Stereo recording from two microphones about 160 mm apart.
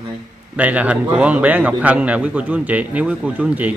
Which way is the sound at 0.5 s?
10° right (ahead or behind).